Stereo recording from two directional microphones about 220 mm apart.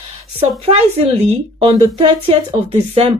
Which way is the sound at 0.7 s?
30° right (ahead or behind).